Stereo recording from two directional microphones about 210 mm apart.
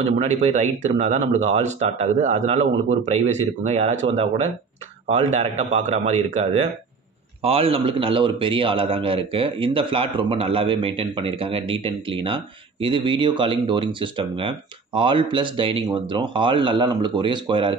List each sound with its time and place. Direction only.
0.0 s speech: 35° right (ahead or behind)